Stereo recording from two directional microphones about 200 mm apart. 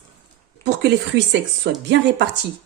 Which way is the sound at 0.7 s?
60° right (ahead or behind).